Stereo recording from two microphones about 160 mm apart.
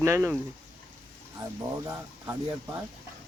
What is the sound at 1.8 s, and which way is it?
Speech, 20° right (ahead or behind).